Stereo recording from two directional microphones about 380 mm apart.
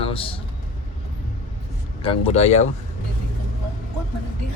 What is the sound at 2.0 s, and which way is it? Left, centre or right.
Speech, centre.